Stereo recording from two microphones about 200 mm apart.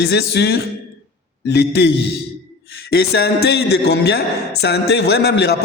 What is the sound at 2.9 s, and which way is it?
Music, 50° left (ahead or behind).